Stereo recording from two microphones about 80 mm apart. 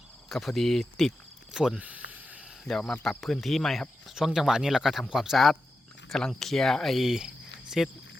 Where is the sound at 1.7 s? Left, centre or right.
Centre.